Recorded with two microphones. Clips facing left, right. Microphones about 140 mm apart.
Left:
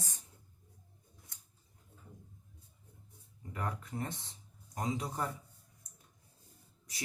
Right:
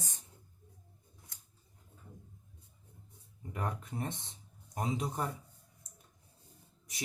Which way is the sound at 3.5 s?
20° right (ahead or behind).